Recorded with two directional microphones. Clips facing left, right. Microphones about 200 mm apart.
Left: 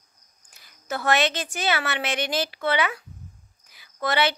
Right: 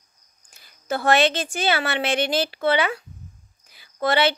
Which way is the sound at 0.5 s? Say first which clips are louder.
Right 4 dB; 30° right (ahead or behind).